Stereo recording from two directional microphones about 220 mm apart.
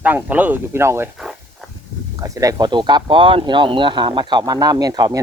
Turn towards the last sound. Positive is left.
turn(degrees=-15)  # may be behind; listen again after turning